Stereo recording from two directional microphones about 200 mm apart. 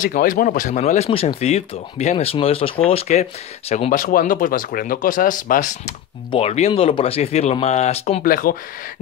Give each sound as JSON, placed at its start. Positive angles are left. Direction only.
{"t": 0.0, "sound": "speech", "side_deg": 45}
{"t": 8.2, "sound": "speech", "side_deg": 45}